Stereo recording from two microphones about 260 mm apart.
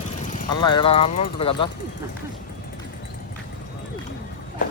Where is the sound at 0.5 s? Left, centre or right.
Centre.